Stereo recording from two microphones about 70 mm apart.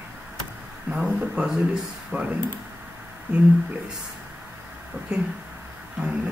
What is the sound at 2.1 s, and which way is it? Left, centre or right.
Speech, right.